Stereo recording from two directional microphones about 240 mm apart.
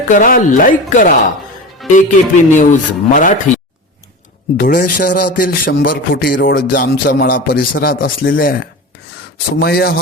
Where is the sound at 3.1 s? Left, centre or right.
Left.